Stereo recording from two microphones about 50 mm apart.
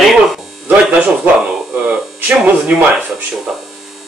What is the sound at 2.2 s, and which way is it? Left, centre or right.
Speech, right.